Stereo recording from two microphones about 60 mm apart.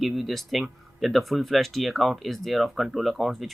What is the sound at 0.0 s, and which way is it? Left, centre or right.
Speech, centre.